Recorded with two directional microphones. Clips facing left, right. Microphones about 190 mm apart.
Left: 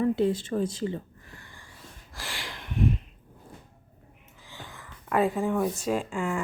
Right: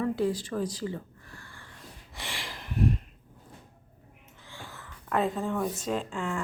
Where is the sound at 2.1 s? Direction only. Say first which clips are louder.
Left 1 dB; centre (ahead or behind).